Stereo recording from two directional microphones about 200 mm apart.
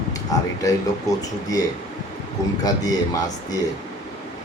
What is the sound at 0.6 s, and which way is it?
Speech, 15° left (ahead or behind).